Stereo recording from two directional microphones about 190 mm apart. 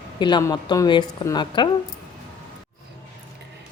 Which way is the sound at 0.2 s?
25° left (ahead or behind).